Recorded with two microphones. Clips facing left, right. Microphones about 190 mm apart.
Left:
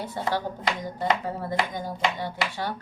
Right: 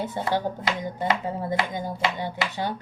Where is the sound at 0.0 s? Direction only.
20° right (ahead or behind).